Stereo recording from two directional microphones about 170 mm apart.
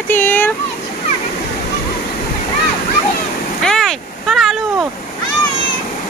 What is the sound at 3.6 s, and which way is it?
Vehicle, centre (ahead or behind).